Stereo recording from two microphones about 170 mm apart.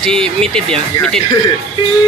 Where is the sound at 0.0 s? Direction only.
5° left (ahead or behind).